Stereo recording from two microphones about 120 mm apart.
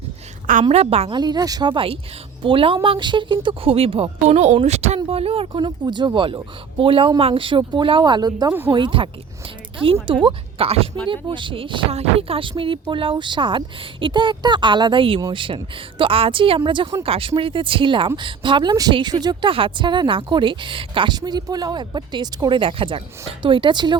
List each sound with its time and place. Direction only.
0.7 s a woman's voice: 60° right (ahead or behind)
1.1 s a woman's voice: 35° right (ahead or behind); by 4.9 s 65° right (ahead or behind)
4.9 s a woman's voice: 50° right (ahead or behind)
5.5 s a woman's voice: 40° right (ahead or behind)
8.7 s a woman's voice: 45° right (ahead or behind)